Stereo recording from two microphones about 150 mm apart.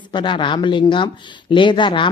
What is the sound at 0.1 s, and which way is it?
Speech, 30° left (ahead or behind).